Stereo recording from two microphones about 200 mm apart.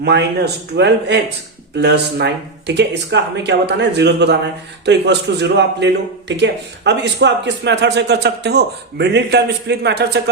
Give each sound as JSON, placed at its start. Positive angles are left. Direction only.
{"t": 0.0, "sound": "a man's voice", "side_deg": -60}